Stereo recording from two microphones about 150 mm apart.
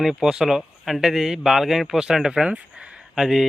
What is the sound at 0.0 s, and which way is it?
Speech, 5° right (ahead or behind).